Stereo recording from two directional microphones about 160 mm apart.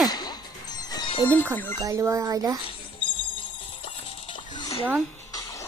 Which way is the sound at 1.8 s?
20° right (ahead or behind).